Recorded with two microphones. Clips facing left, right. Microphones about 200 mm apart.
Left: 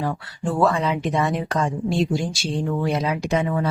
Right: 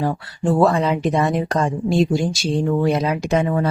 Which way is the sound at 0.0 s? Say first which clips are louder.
Right 5 dB; 35° right (ahead or behind).